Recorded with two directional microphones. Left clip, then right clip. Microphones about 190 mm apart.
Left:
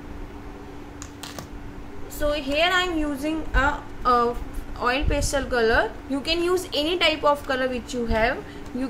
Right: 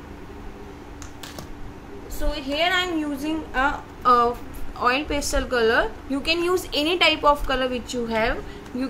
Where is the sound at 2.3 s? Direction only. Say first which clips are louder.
Even; 10° left (ahead or behind).